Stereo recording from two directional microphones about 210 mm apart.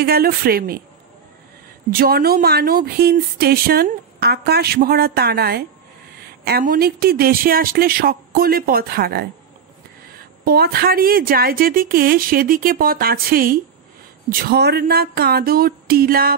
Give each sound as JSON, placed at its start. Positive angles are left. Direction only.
{"t": 0.0, "sound": "speech", "side_deg": -45}
{"t": 1.9, "sound": "speech", "side_deg": -45}
{"t": 10.4, "sound": "speech", "side_deg": -45}